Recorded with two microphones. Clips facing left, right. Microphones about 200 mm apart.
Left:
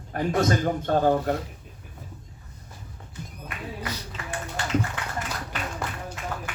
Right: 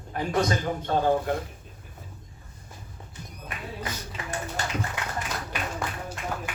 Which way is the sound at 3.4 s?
40° right (ahead or behind).